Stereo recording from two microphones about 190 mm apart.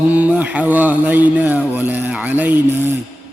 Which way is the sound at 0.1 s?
5° right (ahead or behind).